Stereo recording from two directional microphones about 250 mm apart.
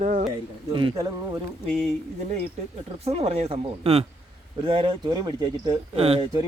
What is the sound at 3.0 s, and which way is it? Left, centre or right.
Speech, right.